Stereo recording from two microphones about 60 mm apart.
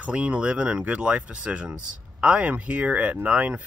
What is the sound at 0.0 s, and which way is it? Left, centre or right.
Speech, right.